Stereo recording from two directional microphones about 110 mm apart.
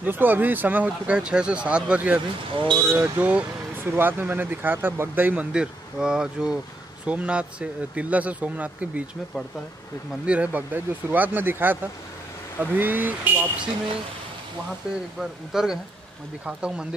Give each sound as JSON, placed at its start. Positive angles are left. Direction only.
{"t": 0.0, "sound": "speech", "side_deg": -15}
{"t": 10.2, "sound": "speech", "side_deg": -10}
{"t": 15.1, "sound": "speech", "side_deg": -5}